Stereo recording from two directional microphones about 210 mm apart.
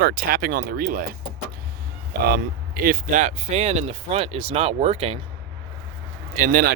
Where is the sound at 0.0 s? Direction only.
45° right (ahead or behind).